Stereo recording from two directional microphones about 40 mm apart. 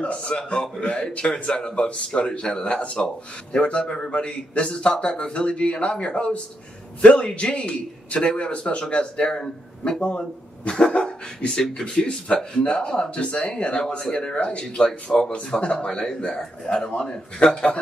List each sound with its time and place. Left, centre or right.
0.0 s a man's voice: left
2.8 s speech: left
3.8 s a man's voice: left